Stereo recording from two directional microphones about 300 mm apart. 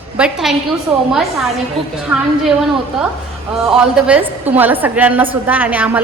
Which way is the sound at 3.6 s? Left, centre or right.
Centre.